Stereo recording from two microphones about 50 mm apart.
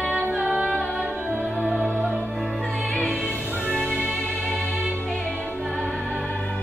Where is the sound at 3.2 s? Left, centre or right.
Left.